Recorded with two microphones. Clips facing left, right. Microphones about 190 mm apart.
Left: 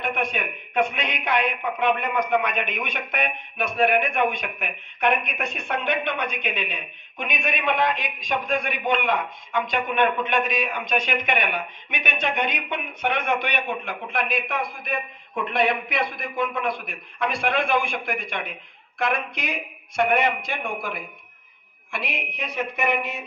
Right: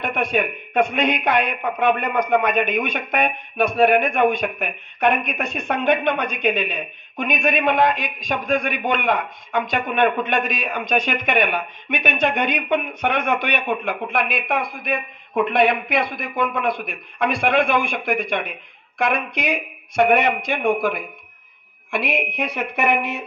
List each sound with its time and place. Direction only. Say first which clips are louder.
0.0 s speech: right 5 dB; 55° right (ahead or behind)